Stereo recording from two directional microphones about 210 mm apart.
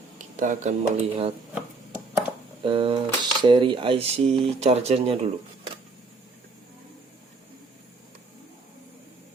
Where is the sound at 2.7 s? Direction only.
25° right (ahead or behind).